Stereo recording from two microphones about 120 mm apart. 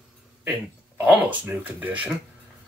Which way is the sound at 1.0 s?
10° right (ahead or behind).